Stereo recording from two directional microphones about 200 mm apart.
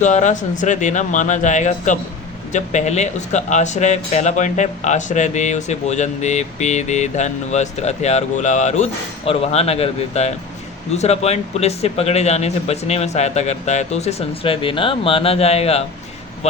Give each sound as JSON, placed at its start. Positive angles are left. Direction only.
{"t": 0.0, "sound": "speech", "side_deg": 35}